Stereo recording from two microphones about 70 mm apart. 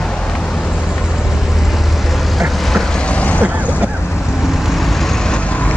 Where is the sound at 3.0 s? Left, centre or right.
Centre.